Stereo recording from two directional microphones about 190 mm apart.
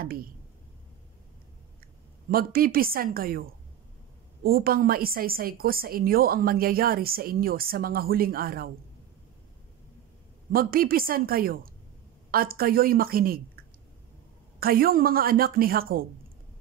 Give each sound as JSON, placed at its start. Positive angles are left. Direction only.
{"t": 0.0, "sound": "speech", "side_deg": -50}
{"t": 2.3, "sound": "a woman's voice", "side_deg": -50}
{"t": 10.5, "sound": "a woman's voice", "side_deg": -50}
{"t": 14.6, "sound": "a woman's voice", "side_deg": -50}